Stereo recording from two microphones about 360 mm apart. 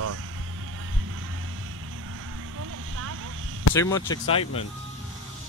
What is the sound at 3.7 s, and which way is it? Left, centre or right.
Speech, centre.